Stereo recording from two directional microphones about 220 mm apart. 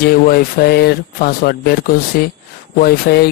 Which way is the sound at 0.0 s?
45° left (ahead or behind).